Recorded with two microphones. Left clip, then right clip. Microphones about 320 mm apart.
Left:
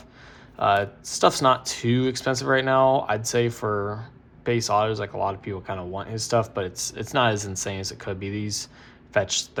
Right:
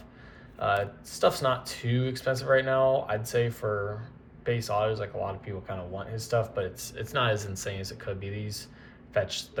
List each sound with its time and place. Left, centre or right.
0.6 s speech: centre